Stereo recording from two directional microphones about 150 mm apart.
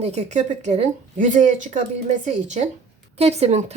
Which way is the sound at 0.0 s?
50° right (ahead or behind).